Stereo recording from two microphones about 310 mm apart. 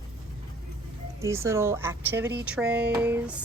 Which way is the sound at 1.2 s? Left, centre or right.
Centre.